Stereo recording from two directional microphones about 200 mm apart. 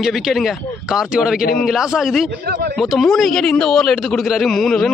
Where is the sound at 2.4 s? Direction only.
55° right (ahead or behind).